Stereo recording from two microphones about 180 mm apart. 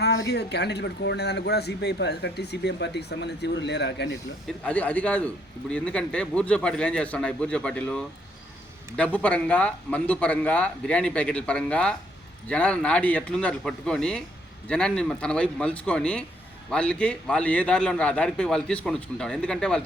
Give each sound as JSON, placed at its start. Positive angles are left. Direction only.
{"t": 0.0, "sound": "speech", "side_deg": 70}
{"t": 4.4, "sound": "a man's voice", "side_deg": 5}